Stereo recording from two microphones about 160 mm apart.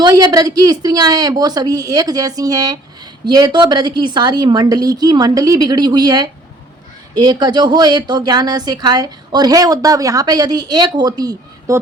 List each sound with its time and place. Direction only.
0.0 s a woman's voice: 25° right (ahead or behind)